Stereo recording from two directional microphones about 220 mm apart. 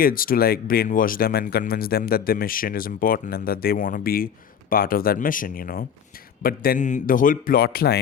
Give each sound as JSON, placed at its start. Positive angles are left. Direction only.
{"t": 0.0, "sound": "speech", "side_deg": 40}